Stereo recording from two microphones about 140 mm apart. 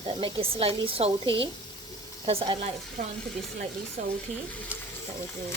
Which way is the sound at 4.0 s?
55° right (ahead or behind).